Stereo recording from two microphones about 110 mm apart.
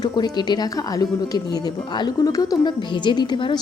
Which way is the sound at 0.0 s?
40° left (ahead or behind).